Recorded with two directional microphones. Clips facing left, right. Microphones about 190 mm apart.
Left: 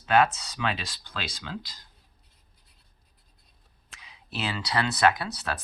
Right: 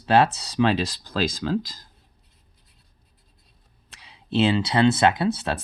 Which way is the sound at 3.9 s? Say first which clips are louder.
Right 14 dB; 30° right (ahead or behind).